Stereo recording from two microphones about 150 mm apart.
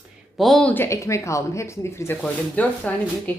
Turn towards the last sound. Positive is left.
turn(degrees=10)  # may be behind; listen again after turning